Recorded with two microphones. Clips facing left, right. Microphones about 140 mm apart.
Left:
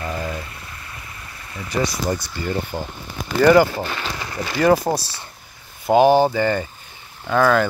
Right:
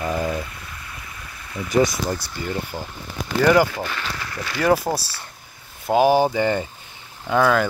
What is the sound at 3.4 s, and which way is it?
Speech, 5° right (ahead or behind).